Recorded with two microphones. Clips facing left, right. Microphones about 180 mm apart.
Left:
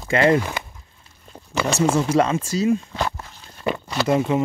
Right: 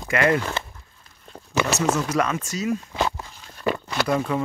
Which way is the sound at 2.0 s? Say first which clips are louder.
Left 5 dB; 30° left (ahead or behind).